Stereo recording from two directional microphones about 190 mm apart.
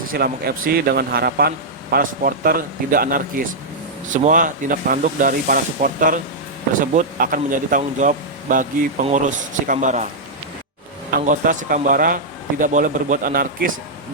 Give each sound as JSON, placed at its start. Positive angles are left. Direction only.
{"t": 0.1, "sound": "a man's voice", "side_deg": -50}
{"t": 9.6, "sound": "speech", "side_deg": -40}
{"t": 11.3, "sound": "a man's voice", "side_deg": -45}